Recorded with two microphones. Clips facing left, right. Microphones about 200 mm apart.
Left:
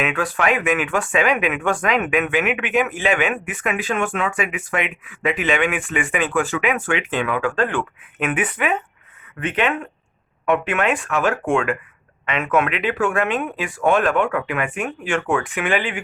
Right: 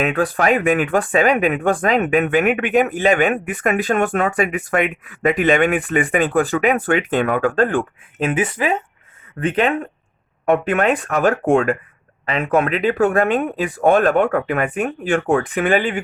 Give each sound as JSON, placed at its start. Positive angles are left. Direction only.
{"t": 0.0, "sound": "speech", "side_deg": -35}